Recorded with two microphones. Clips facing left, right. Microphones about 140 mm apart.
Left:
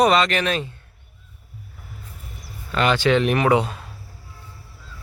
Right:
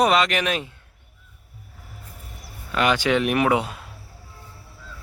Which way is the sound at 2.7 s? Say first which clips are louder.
Left 2 dB; 10° right (ahead or behind).